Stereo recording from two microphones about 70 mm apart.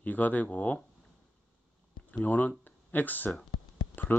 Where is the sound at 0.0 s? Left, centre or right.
Left.